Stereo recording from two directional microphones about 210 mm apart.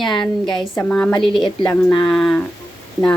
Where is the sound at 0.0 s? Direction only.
Centre (ahead or behind).